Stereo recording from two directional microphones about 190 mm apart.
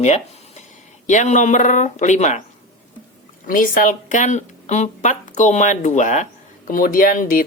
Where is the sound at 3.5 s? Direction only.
45° left (ahead or behind).